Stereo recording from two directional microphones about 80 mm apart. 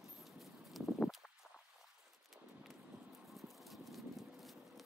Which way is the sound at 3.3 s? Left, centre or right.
Centre.